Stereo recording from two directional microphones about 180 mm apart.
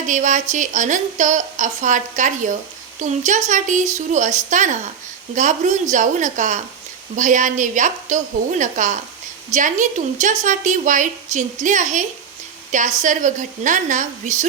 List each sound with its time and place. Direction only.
0.1 s a woman's voice: 45° right (ahead or behind)